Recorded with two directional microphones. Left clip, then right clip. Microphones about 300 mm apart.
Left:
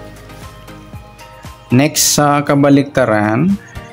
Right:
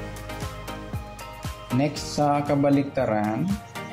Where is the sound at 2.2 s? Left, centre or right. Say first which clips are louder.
Left 8 dB; left.